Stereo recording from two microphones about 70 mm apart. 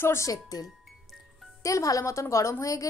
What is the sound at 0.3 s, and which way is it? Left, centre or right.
Speech, left.